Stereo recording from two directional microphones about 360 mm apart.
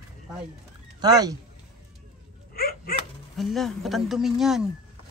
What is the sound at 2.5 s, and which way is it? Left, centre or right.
Dog, left.